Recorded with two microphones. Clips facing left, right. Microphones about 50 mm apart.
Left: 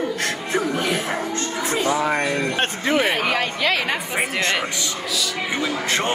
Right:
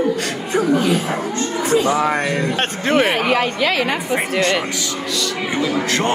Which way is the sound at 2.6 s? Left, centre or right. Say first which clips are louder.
Right 4 dB; right.